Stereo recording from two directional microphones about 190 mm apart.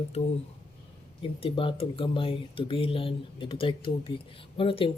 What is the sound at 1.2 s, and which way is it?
Speech, 25° left (ahead or behind).